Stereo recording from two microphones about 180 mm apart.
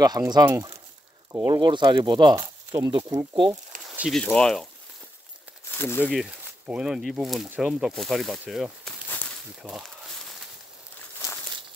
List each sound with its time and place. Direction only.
0.0 s speech: 20° right (ahead or behind)
3.7 s a sound: 50° right (ahead or behind)
4.1 s speech: 5° left (ahead or behind)
5.7 s speech: 10° left (ahead or behind)
6.0 s speech: 5° right (ahead or behind)
9.6 s a sound: 5° right (ahead or behind)